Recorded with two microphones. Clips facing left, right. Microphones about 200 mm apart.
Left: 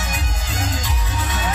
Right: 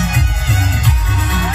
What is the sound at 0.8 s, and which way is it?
Music, 60° right (ahead or behind).